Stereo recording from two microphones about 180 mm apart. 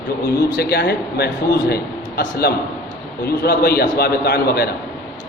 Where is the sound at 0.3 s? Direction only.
65° left (ahead or behind).